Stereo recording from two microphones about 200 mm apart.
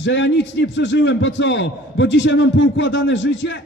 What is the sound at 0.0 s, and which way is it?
A man's voice, 60° left (ahead or behind).